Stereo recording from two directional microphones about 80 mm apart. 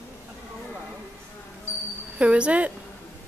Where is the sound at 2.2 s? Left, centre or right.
Centre.